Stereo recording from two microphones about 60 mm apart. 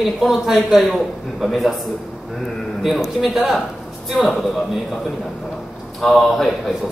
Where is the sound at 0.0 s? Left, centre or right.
Centre.